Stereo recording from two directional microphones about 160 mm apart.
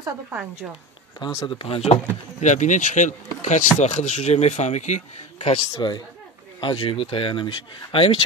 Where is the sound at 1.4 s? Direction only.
35° left (ahead or behind).